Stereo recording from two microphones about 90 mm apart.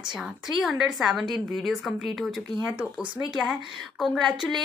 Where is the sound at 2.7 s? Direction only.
15° right (ahead or behind).